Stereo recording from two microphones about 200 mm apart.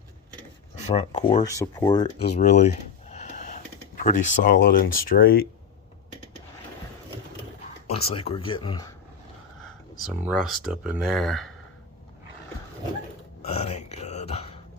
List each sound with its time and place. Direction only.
0.8 s speech: 35° left (ahead or behind)
2.4 s a sound: 35° left (ahead or behind)
4.0 s speech: 40° left (ahead or behind)
7.9 s speech: 30° left (ahead or behind)
10.2 s speech: centre (ahead or behind)
13.4 s a sound: 30° left (ahead or behind)